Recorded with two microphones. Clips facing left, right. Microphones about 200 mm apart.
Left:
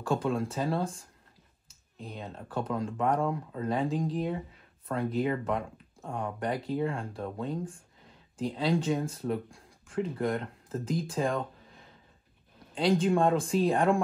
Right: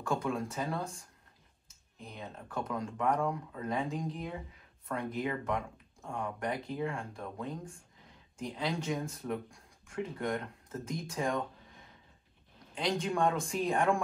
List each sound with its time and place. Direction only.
0.0 s speech: 30° left (ahead or behind)
12.7 s speech: 30° left (ahead or behind)